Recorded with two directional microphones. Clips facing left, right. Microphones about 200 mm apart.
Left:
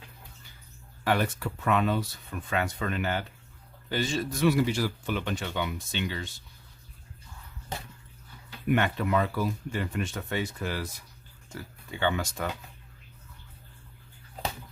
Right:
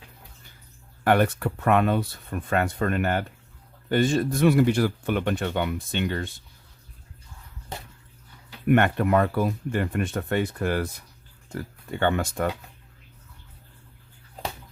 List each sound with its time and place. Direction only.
1.0 s speech: 60° right (ahead or behind)
8.6 s speech: 55° right (ahead or behind)